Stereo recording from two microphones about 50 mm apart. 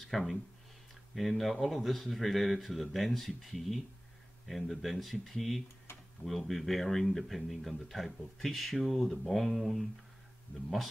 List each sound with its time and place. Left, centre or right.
0.1 s speech: centre
5.9 s tick-tock: left
6.2 s speech: centre